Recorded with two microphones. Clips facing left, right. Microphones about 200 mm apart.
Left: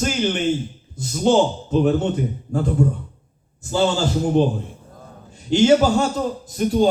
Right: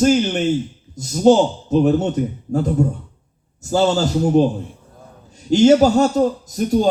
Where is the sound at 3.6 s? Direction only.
40° right (ahead or behind).